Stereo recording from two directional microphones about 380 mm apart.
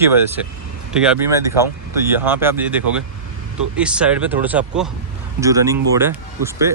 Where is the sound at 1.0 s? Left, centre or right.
Centre.